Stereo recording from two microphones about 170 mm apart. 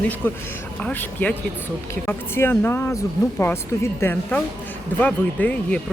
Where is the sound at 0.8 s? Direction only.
10° left (ahead or behind).